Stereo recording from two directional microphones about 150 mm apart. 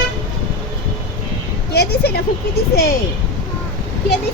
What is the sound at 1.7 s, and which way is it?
Speech, 90° left.